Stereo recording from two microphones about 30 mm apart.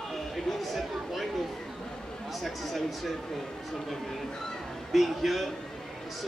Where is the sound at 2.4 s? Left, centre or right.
Centre.